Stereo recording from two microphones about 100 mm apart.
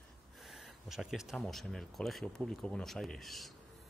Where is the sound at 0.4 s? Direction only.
Centre (ahead or behind).